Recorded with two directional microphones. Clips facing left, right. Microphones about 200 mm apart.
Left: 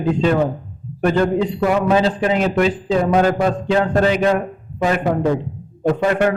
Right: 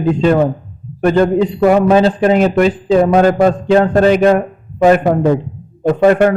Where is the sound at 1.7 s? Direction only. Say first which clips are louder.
Right 7 dB; 45° right (ahead or behind).